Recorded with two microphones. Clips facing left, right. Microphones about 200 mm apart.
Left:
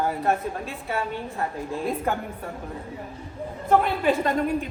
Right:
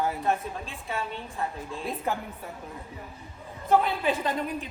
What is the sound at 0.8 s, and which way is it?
A woman's voice, 60° left (ahead or behind).